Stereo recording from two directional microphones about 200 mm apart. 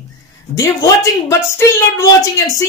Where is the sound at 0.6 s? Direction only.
15° left (ahead or behind).